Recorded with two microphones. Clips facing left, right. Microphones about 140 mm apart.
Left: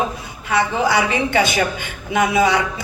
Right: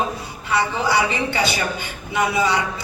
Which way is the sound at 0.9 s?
50° left (ahead or behind).